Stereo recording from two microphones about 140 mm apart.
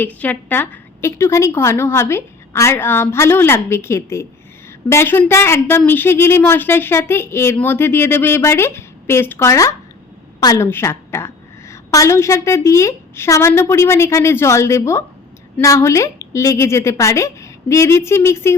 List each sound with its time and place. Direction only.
0.0 s a woman's voice: 10° left (ahead or behind)